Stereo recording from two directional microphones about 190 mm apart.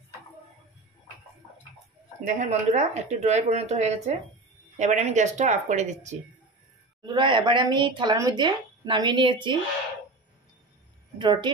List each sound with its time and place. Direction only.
2.2 s speech: 40° right (ahead or behind)
7.1 s speech: 25° right (ahead or behind)
11.1 s a woman's voice: 25° right (ahead or behind)